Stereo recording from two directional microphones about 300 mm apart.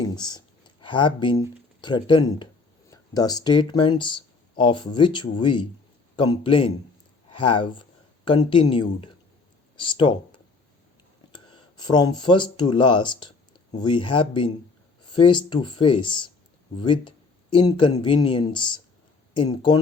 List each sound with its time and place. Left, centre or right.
0.0 s speech: centre